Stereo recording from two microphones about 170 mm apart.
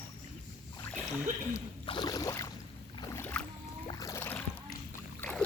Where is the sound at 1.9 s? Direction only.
25° left (ahead or behind).